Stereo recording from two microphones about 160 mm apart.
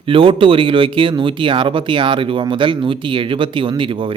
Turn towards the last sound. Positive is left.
turn(degrees=-30)  # may be behind; listen again after turning